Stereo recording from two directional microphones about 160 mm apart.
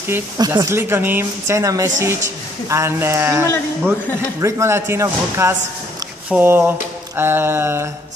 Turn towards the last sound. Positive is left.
turn(degrees=-15)  # may be behind; listen again after turning